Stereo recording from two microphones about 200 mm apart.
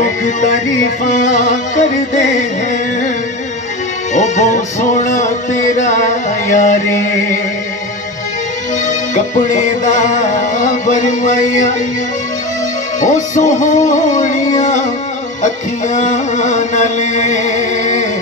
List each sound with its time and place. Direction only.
0.2 s music: 35° left (ahead or behind)
4.1 s music: 35° left (ahead or behind)
6.5 s music: 35° left (ahead or behind)
8.8 s music: 40° left (ahead or behind)
13.0 s music: 40° left (ahead or behind)